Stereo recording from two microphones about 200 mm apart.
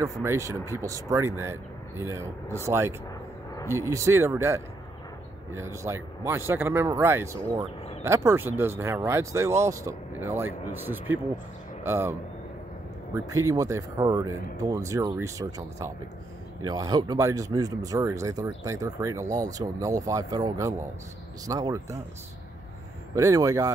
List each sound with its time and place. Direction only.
0.0 s speech: 15° right (ahead or behind)
23.1 s speech: 15° right (ahead or behind)